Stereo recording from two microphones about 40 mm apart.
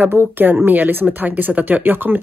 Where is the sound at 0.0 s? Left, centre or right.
Right.